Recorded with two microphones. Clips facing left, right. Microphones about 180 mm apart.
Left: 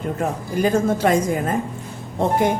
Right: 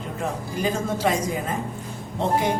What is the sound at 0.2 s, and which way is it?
A woman's voice, 50° left (ahead or behind).